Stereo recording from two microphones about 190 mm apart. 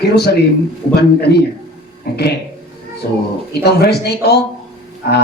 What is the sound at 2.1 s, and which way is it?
Speech, 55° left (ahead or behind).